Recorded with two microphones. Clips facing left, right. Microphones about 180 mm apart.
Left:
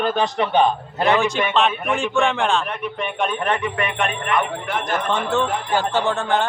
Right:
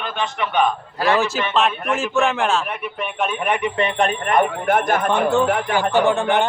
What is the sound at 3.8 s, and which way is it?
Music, 35° right (ahead or behind).